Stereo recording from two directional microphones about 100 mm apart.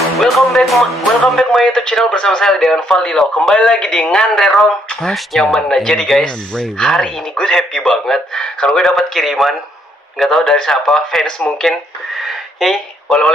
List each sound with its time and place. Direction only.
0.2 s speech: centre (ahead or behind)